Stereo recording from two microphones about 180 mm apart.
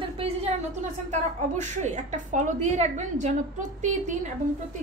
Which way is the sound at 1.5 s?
40° right (ahead or behind).